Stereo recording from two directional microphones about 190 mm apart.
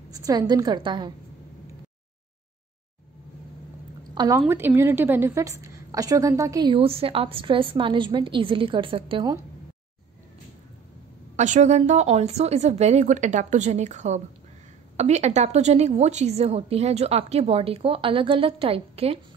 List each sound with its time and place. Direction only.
0.1 s a woman's voice: 20° right (ahead or behind)
4.1 s a sound: 20° right (ahead or behind)
4.5 s a woman's voice: 10° right (ahead or behind)
11.3 s a woman's voice: 40° right (ahead or behind)